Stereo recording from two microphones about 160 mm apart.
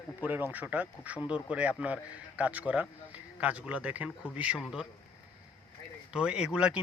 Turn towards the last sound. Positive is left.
turn(degrees=-5)  # may be behind; listen again after turning